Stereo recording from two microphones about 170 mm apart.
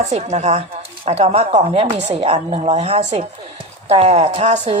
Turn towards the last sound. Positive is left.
turn(degrees=-40)  # may be behind; listen again after turning